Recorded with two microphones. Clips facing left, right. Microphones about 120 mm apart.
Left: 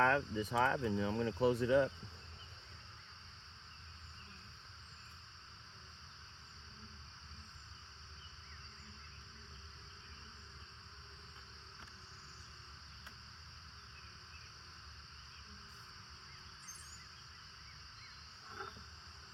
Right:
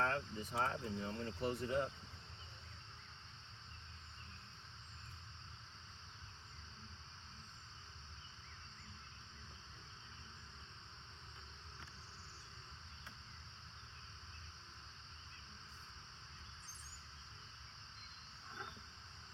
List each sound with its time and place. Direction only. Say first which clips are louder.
0.0 s speech: left 7 dB; 90° left